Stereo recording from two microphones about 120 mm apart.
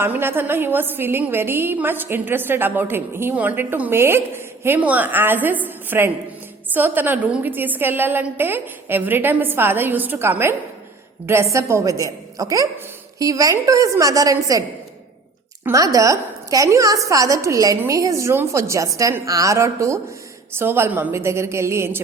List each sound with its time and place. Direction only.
0.0 s a woman's voice: 20° right (ahead or behind)
15.6 s a woman's voice: 25° right (ahead or behind)